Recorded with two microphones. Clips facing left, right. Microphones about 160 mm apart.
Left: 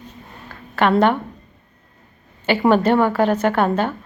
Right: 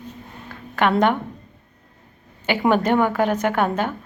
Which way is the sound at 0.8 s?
15° right (ahead or behind).